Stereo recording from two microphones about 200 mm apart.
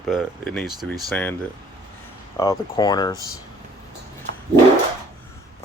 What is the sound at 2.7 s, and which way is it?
Speech, 20° left (ahead or behind).